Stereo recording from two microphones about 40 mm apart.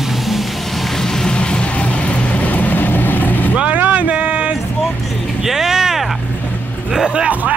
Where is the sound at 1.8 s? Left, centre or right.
Left.